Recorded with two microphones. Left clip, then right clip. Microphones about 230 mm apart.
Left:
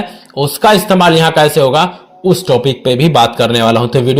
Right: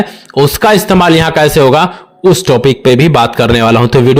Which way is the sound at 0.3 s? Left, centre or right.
Right.